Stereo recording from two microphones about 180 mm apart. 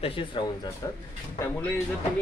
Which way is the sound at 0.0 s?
30° left (ahead or behind).